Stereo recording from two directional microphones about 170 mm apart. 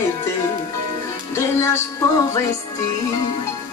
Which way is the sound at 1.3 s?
15° left (ahead or behind).